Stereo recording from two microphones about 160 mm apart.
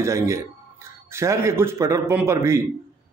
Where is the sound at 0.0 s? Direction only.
20° right (ahead or behind).